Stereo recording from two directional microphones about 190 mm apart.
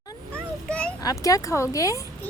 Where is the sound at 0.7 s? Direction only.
5° left (ahead or behind).